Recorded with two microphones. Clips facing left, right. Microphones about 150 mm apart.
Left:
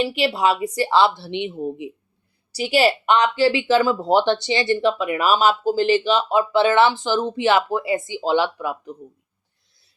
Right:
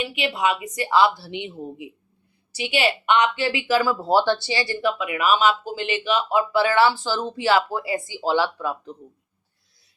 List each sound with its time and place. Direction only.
0.0 s a woman's voice: 35° left (ahead or behind)
2.5 s a woman's voice: 40° left (ahead or behind); by 9.0 s 15° left (ahead or behind)